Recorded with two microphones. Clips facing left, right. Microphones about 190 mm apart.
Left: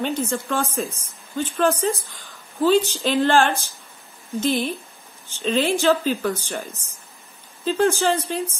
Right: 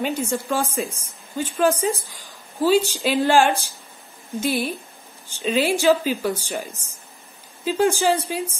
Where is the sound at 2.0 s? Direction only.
10° right (ahead or behind).